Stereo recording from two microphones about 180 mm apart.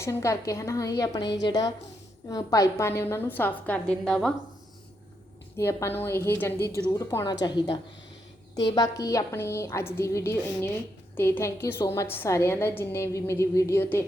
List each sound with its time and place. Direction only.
0.0 s a woman's voice: 15° left (ahead or behind)
5.5 s a woman's voice: 15° left (ahead or behind)